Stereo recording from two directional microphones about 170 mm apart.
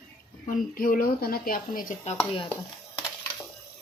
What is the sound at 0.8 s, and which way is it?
Speech, 55° left (ahead or behind).